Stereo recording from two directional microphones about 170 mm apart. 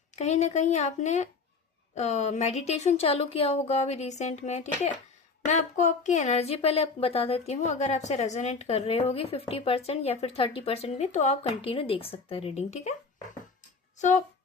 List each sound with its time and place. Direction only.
0.2 s a woman's voice: 40° left (ahead or behind)
14.0 s a woman's voice: 45° left (ahead or behind)